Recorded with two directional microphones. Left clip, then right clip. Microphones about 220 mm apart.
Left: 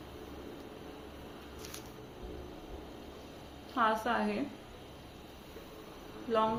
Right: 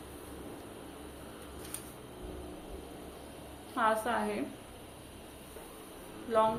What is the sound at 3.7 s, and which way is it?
Speech, centre (ahead or behind).